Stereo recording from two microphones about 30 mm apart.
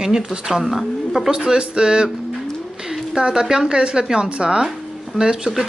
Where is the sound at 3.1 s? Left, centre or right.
Right.